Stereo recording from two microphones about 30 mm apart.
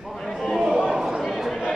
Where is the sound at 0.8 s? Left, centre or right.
Centre.